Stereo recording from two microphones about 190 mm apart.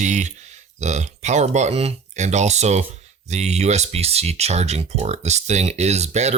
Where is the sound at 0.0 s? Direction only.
40° right (ahead or behind).